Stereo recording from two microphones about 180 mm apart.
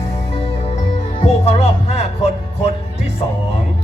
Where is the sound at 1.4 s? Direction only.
35° left (ahead or behind).